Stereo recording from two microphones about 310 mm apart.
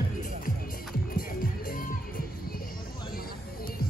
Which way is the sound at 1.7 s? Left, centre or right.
Left.